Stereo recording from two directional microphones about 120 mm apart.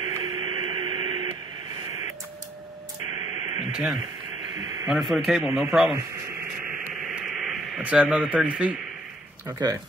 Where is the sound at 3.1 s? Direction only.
35° right (ahead or behind).